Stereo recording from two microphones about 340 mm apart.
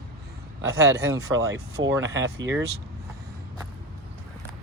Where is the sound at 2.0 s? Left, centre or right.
Right.